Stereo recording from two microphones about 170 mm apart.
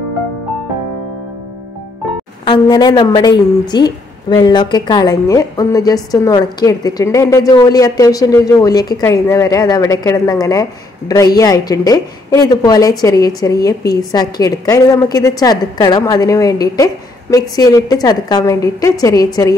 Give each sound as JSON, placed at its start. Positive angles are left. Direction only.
{"t": 2.4, "sound": "a woman's voice", "side_deg": 25}